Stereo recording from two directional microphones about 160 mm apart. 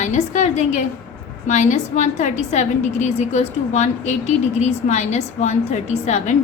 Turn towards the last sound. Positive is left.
turn(degrees=45)  # may be behind; listen again after turning